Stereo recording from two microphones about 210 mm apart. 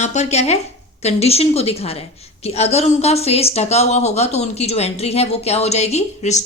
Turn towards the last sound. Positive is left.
turn(degrees=30)  # may be behind; listen again after turning